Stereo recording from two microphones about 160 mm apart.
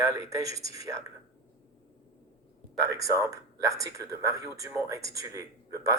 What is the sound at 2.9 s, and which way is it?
Speech, 20° right (ahead or behind).